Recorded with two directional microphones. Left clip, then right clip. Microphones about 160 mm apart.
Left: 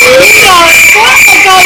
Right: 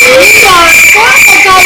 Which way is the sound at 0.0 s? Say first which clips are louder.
Even; centre (ahead or behind).